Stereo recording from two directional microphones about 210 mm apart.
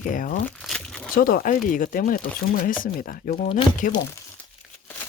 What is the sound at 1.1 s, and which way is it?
Speech, 45° left (ahead or behind).